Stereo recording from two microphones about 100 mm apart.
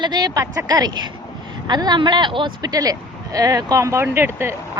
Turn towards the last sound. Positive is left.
turn(degrees=-25)  # may be behind; listen again after turning